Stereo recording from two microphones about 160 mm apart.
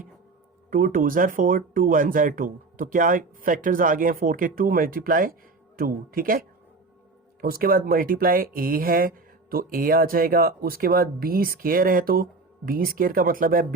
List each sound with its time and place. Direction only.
0.7 s speech: 60° right (ahead or behind)
7.4 s speech: 65° right (ahead or behind)